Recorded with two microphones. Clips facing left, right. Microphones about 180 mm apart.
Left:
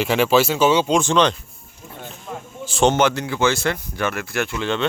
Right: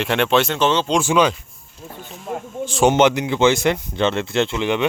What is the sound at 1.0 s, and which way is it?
Speech, 10° right (ahead or behind).